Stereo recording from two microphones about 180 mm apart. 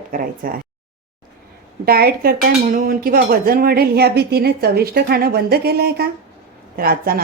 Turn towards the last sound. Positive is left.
turn(degrees=-55)  # may be behind; listen again after turning